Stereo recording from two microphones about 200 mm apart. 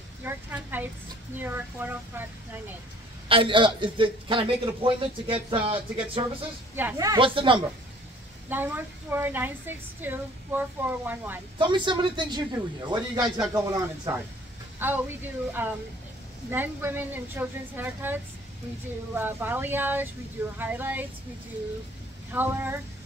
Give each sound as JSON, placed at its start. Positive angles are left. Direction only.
{"t": 0.2, "sound": "a woman's voice", "side_deg": -10}
{"t": 3.3, "sound": "a man's voice", "side_deg": -25}
{"t": 6.7, "sound": "a man's voice", "side_deg": -10}
{"t": 8.5, "sound": "a woman's voice", "side_deg": -10}
{"t": 11.5, "sound": "a man's voice", "side_deg": -25}
{"t": 22.3, "sound": "a woman's voice", "side_deg": -10}